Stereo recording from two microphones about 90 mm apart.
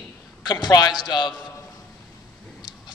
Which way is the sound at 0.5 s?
50° left (ahead or behind).